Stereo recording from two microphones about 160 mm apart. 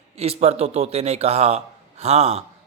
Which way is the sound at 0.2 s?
40° right (ahead or behind).